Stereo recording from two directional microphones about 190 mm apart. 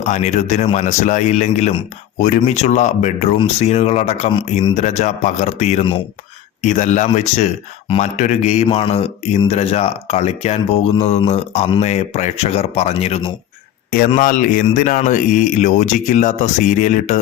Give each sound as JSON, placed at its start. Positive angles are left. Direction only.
{"t": 0.0, "sound": "speech", "side_deg": 40}
{"t": 14.2, "sound": "speech", "side_deg": 40}